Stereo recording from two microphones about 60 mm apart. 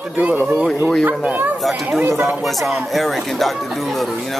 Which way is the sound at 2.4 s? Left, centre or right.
Centre.